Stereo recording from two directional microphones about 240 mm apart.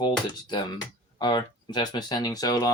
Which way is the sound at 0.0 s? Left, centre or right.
Centre.